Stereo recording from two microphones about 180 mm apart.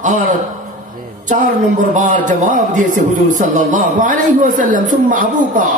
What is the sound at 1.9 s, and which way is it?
A man's voice, 45° right (ahead or behind).